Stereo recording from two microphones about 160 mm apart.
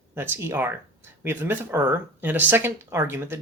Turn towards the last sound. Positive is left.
turn(degrees=-15)  # may be behind; listen again after turning